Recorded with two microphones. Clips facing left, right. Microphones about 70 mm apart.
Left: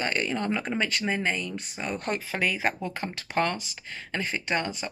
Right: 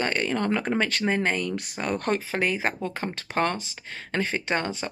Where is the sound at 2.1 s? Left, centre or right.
Right.